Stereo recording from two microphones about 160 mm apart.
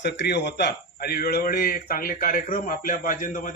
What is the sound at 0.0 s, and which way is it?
A man's voice, 90° left.